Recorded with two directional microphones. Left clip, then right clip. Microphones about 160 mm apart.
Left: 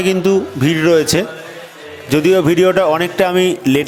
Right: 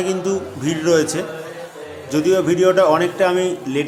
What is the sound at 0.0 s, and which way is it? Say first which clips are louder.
Speech: left 7 dB; 45° left (ahead or behind).